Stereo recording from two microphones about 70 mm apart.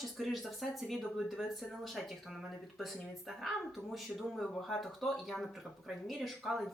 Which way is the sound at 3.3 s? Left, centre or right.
Centre.